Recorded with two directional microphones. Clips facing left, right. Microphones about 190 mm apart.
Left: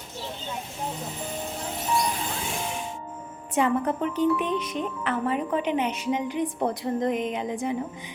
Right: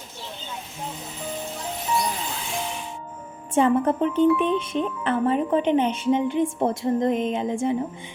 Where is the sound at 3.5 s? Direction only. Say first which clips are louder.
Right 4 dB; 30° right (ahead or behind).